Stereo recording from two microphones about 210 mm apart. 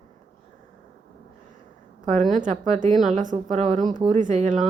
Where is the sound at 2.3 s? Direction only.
35° right (ahead or behind).